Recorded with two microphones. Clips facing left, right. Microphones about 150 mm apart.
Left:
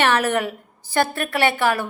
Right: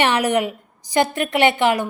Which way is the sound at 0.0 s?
15° right (ahead or behind).